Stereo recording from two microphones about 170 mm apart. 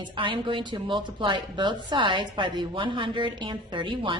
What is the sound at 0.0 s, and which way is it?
A woman's voice, 30° right (ahead or behind).